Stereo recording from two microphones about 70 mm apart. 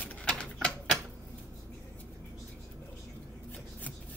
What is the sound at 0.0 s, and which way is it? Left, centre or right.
Typewriter, centre.